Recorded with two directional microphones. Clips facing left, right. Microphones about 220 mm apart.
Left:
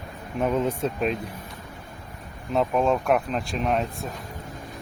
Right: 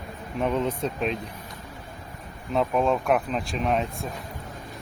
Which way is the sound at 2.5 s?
Centre (ahead or behind).